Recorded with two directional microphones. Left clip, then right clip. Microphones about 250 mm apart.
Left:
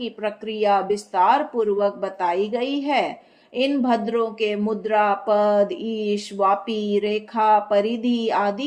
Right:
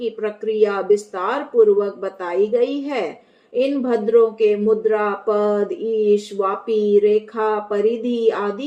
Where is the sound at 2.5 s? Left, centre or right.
Left.